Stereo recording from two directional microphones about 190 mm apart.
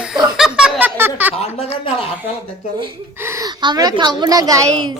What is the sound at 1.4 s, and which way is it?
Speech, 35° left (ahead or behind).